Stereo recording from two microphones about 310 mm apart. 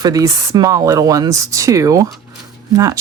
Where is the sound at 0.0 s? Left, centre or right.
Centre.